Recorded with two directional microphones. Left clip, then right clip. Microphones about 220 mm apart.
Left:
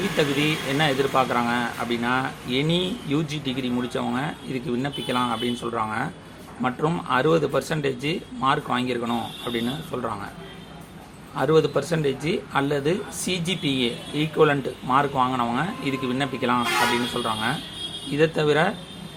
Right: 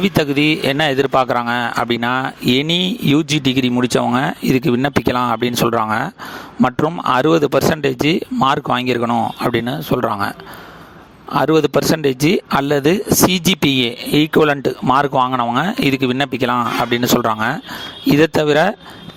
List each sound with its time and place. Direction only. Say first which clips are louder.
0.2 s speech: right 7 dB; 50° right (ahead or behind)
11.3 s speech: right 6 dB; 50° right (ahead or behind)